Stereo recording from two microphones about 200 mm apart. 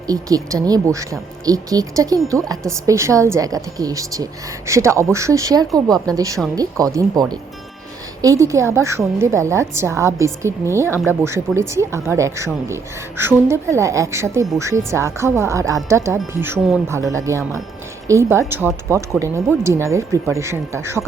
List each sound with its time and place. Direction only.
0.1 s a woman's voice: 15° right (ahead or behind)